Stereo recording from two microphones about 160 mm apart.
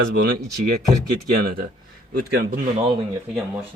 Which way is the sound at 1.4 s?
70° right (ahead or behind).